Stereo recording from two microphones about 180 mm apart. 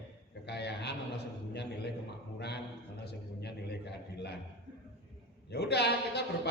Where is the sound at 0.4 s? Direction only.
70° left (ahead or behind).